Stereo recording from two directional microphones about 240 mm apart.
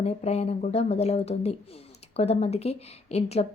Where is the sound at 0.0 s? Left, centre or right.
Left.